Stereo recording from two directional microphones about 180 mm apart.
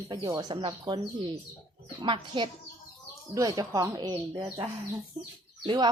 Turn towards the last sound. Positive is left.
turn(degrees=-25)  # may be behind; listen again after turning